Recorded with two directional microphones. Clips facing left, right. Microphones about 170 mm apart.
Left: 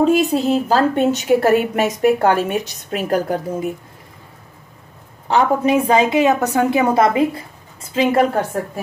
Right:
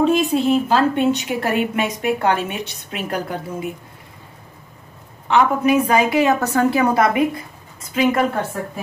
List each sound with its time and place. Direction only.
0.0 s a woman's voice: 40° left (ahead or behind)
5.3 s a woman's voice: 30° left (ahead or behind)